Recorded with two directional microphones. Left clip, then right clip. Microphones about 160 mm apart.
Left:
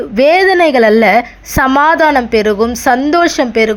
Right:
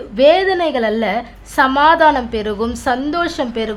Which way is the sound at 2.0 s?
25° left (ahead or behind).